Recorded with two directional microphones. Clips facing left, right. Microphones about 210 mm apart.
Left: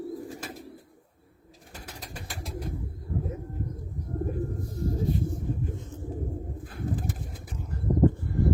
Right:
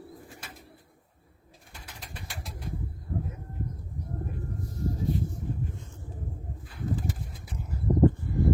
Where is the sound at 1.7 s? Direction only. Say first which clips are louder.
Left 4 dB; 40° left (ahead or behind).